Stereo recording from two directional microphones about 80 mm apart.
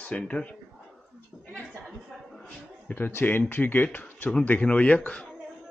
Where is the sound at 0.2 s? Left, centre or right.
Centre.